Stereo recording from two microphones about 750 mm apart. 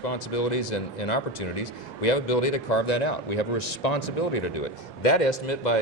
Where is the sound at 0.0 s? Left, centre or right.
Left.